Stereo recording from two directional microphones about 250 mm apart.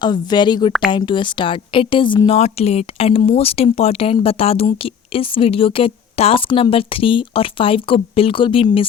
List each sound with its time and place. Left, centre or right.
0.0 s a woman's voice: centre